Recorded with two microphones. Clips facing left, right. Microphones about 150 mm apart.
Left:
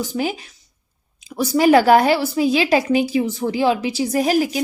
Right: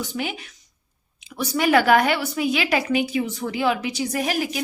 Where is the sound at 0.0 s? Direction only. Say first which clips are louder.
Left 6 dB; 35° left (ahead or behind).